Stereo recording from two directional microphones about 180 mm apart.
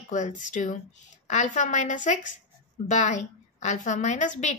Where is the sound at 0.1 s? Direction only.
40° left (ahead or behind).